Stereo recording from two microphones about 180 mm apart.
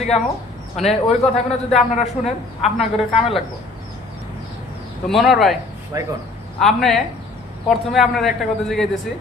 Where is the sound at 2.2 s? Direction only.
35° left (ahead or behind).